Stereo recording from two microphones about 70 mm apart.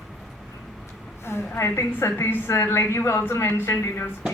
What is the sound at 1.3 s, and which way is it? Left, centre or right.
A woman's voice, left.